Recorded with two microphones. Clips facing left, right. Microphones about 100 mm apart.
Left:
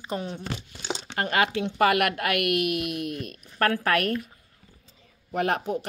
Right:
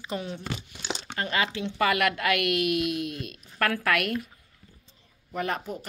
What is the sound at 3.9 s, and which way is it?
Speech, 40° left (ahead or behind).